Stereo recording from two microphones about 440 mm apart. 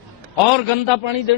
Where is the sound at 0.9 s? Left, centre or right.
Left.